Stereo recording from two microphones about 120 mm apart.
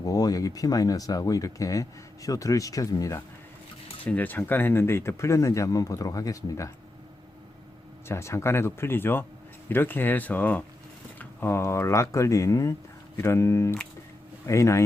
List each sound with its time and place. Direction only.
0.0 s speech: 30° left (ahead or behind)
4.0 s speech: 15° left (ahead or behind); by 6.7 s 30° left (ahead or behind)
8.0 s speech: 20° left (ahead or behind)